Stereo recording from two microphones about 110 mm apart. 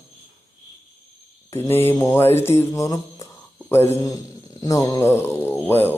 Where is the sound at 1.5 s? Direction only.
20° left (ahead or behind).